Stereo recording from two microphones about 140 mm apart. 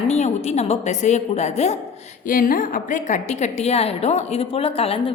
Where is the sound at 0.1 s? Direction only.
50° left (ahead or behind).